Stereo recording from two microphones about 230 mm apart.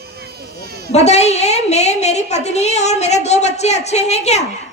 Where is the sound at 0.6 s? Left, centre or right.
Right.